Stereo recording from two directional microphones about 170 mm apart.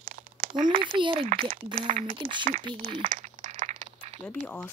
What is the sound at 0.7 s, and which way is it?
A child's voice, 30° right (ahead or behind).